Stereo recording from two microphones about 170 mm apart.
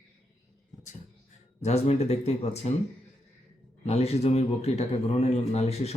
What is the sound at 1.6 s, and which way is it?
A man's voice, 40° left (ahead or behind).